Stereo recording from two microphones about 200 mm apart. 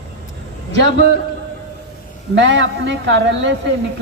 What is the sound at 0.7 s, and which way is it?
Speech, 60° right (ahead or behind).